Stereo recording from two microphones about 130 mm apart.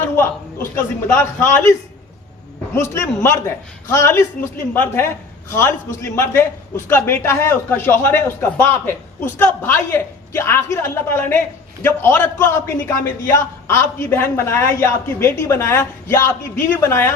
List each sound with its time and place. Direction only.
0.0 s a man's voice: 20° left (ahead or behind)
2.7 s a man's voice: 20° left (ahead or behind)